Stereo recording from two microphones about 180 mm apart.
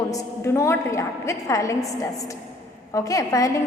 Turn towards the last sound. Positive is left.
turn(degrees=20)  # may be behind; listen again after turning